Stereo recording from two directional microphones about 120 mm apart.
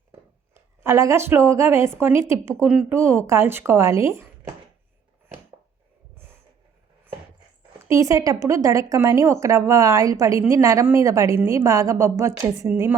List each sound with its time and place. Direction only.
0.8 s speech: 25° right (ahead or behind)
7.9 s speech: 25° right (ahead or behind)